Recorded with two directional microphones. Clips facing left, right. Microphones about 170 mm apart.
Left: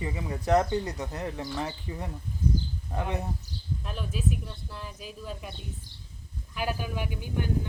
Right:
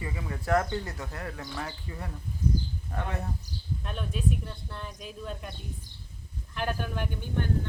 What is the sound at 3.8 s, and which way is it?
Speech, centre (ahead or behind).